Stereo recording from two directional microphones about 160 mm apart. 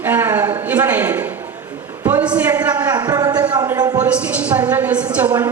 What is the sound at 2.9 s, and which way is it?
Speech, 25° right (ahead or behind).